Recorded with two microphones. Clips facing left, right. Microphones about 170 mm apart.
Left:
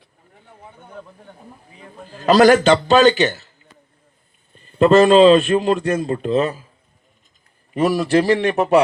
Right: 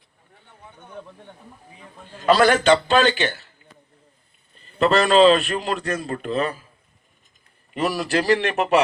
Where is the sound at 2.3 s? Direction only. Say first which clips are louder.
Left 4 dB; 40° left (ahead or behind).